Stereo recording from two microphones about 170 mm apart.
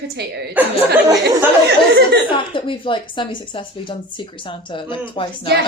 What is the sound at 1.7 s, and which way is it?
Speech, 80° right.